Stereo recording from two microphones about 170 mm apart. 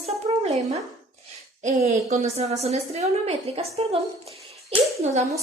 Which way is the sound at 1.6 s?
45° right (ahead or behind).